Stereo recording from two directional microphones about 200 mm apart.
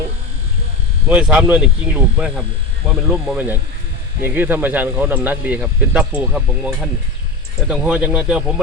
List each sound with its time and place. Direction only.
1.0 s speech: 5° right (ahead or behind)